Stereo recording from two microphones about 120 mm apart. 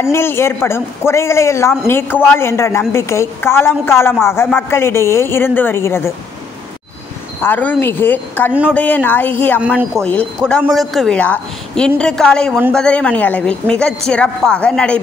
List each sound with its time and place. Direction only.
0.0 s a woman's voice: 20° left (ahead or behind)
7.4 s speech: 15° left (ahead or behind)
10.7 s speech: centre (ahead or behind)
11.1 s speech: 10° left (ahead or behind)